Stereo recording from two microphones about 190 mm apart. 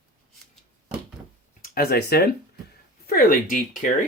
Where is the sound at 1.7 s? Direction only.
55° left (ahead or behind).